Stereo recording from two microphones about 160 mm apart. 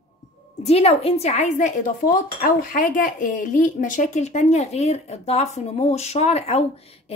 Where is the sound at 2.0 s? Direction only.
60° left (ahead or behind).